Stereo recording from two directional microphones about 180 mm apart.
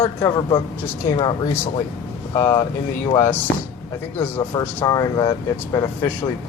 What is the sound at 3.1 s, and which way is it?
Speech, 10° left (ahead or behind).